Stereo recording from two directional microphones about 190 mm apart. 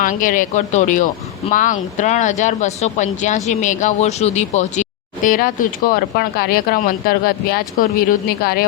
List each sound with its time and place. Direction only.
0.0 s speech: 45° left (ahead or behind)